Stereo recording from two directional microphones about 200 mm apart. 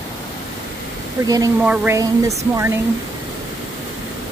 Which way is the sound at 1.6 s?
10° right (ahead or behind).